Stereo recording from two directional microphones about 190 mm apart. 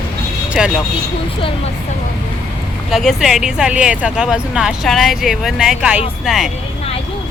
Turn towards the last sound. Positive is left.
turn(degrees=-5)  # may be behind; listen again after turning